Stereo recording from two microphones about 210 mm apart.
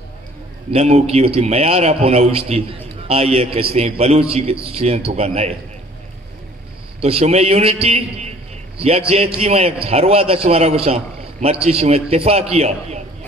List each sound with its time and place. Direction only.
0.7 s a man's voice: 30° right (ahead or behind)
7.0 s a man's voice: 30° right (ahead or behind)